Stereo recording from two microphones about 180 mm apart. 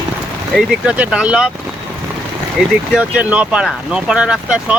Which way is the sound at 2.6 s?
5° right (ahead or behind).